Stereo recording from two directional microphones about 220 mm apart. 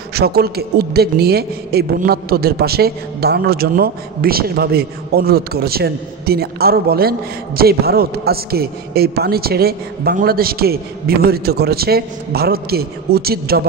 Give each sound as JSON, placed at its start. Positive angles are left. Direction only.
{"t": 0.1, "sound": "a man's voice", "side_deg": -45}